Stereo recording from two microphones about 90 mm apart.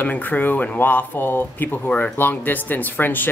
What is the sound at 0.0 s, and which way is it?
Speech, 20° left (ahead or behind).